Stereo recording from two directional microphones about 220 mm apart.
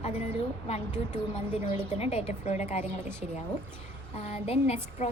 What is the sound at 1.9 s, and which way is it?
Speech, 30° left (ahead or behind).